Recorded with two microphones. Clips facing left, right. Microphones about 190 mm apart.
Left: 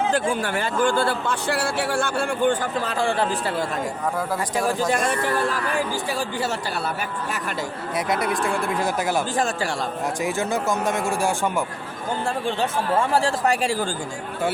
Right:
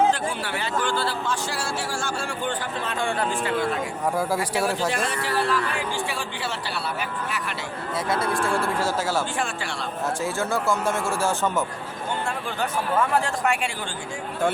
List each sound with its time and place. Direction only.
0.1 s speech: 50° left (ahead or behind)
4.9 s speech: 45° left (ahead or behind)
7.9 s speech: 20° left (ahead or behind)
10.2 s speech: 20° left (ahead or behind)
12.5 s speech: 30° left (ahead or behind)